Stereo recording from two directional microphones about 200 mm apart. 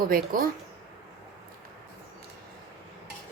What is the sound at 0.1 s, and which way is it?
Speech, 45° right (ahead or behind).